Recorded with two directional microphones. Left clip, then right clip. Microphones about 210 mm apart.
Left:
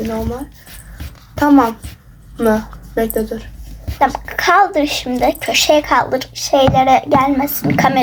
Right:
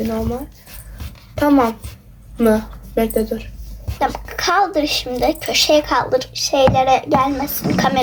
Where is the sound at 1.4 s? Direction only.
5° right (ahead or behind).